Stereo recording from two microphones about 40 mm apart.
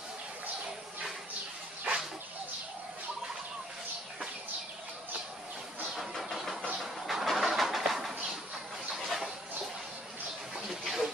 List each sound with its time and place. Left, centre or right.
1.9 s bird: right
6.2 s vehicle: centre
6.8 s pigeon: centre
10.8 s a sound: centre